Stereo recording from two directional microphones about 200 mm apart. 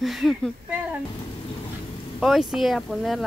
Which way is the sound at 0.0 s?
Centre (ahead or behind).